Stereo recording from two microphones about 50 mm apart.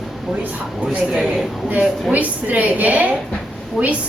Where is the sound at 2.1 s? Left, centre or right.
Right.